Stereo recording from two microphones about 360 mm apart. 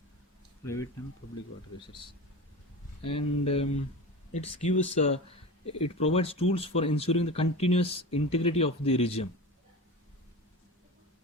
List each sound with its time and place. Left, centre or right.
0.6 s speech: centre
3.1 s speech: centre